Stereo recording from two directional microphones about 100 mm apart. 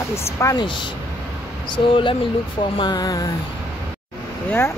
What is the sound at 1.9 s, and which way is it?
Speech, 60° left (ahead or behind).